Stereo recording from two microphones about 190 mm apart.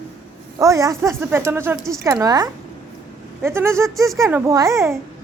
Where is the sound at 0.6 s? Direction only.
15° right (ahead or behind).